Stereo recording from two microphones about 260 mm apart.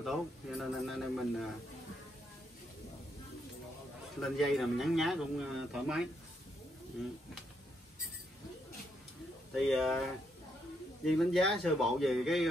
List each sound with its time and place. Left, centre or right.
0.0 s speech: centre
4.2 s speech: centre
9.6 s speech: centre